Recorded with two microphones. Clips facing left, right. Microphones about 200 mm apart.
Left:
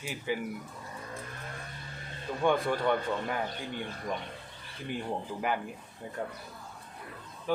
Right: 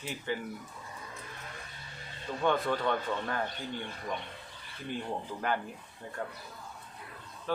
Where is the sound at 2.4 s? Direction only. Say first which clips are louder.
Left 2 dB; 10° left (ahead or behind).